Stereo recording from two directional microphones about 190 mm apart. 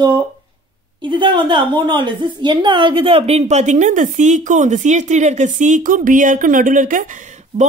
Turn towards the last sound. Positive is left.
turn(degrees=-40)  # may be behind; listen again after turning